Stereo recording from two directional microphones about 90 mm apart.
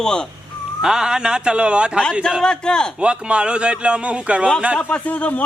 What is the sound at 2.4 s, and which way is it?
Speech, 10° left (ahead or behind).